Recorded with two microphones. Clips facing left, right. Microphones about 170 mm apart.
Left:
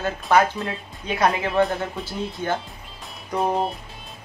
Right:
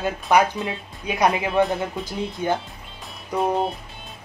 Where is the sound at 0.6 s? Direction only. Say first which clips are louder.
Right 1 dB; centre (ahead or behind).